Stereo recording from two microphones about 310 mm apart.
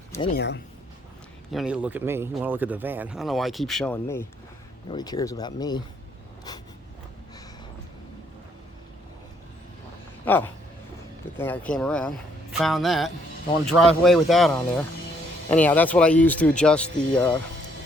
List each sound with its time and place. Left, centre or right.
0.3 s speech: left
1.5 s speech: centre
10.2 s speech: centre